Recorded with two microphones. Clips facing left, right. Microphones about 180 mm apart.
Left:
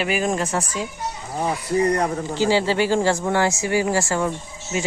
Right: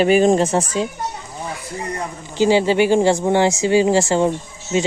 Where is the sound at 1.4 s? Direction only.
70° left (ahead or behind).